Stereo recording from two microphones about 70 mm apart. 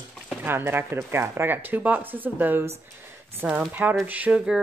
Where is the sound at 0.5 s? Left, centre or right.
Right.